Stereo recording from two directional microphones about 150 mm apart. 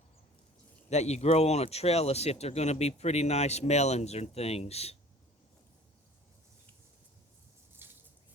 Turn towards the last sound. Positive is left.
turn(degrees=-15)  # may be behind; listen again after turning